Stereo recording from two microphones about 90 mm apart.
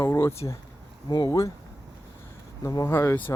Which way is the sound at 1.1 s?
50° left (ahead or behind).